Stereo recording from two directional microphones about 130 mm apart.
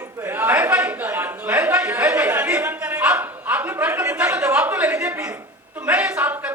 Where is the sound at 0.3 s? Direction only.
15° right (ahead or behind).